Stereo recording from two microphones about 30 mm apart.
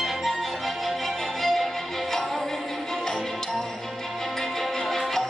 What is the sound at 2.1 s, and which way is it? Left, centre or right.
Music, centre.